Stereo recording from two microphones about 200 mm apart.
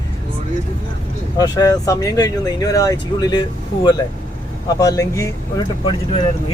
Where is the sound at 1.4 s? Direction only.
20° left (ahead or behind).